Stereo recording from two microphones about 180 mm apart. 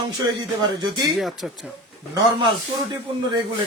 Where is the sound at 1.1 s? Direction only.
Centre (ahead or behind).